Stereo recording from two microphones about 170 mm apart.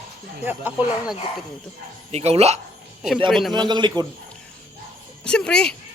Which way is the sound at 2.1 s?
40° right (ahead or behind).